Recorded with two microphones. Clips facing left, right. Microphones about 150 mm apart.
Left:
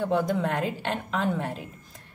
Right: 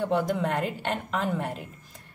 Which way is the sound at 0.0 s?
Centre (ahead or behind).